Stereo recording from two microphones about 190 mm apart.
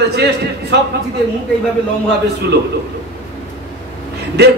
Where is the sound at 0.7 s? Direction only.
70° right (ahead or behind).